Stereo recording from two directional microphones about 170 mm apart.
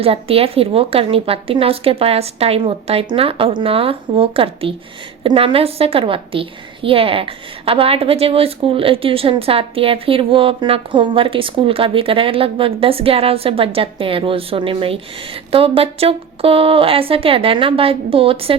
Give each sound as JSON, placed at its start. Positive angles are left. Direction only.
{"t": 0.0, "sound": "a woman's voice", "side_deg": -35}